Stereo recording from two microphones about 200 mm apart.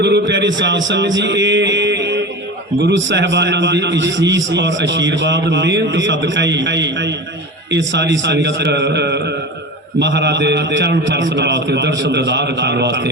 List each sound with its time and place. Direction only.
0.0 s a man's voice: 60° right (ahead or behind)